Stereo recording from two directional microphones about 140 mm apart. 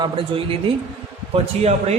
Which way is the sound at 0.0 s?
40° right (ahead or behind).